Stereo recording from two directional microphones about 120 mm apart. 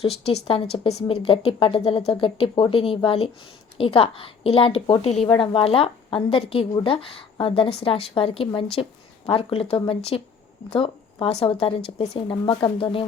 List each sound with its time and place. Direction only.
0.0 s a woman's voice: 55° left (ahead or behind)